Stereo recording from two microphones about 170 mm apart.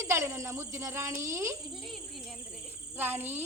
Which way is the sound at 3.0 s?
10° right (ahead or behind).